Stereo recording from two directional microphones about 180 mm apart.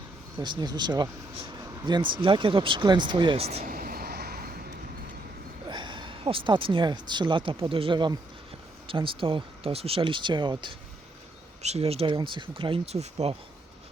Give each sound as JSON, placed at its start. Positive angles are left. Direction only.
{"t": 0.3, "sound": "speech", "side_deg": -25}
{"t": 3.6, "sound": "vehicle", "side_deg": -55}
{"t": 5.6, "sound": "speech", "side_deg": -25}